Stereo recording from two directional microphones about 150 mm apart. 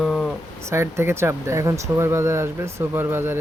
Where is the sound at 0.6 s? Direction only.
15° right (ahead or behind).